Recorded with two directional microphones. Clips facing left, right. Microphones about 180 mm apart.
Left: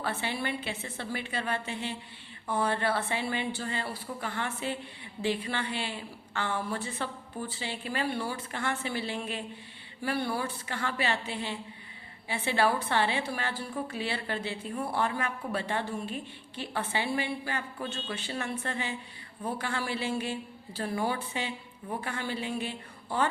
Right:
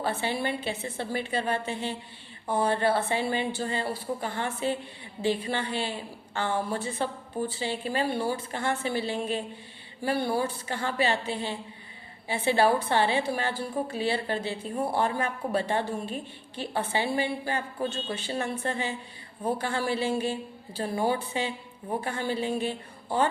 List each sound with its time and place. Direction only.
0.0 s a woman's voice: 30° right (ahead or behind)